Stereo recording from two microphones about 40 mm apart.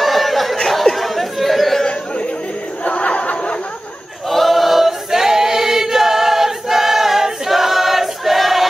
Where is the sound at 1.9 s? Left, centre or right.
Left.